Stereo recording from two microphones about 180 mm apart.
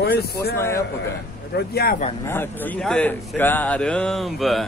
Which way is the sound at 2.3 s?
10° left (ahead or behind).